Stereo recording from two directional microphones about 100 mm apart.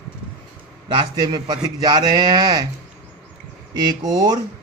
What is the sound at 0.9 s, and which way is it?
A man's voice, 50° right (ahead or behind).